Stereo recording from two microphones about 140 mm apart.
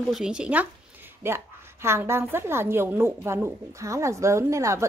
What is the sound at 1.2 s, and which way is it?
A woman's voice, 20° right (ahead or behind).